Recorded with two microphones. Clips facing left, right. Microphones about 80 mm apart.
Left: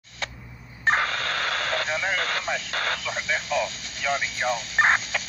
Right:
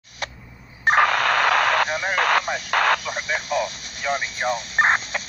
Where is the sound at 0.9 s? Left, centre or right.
Right.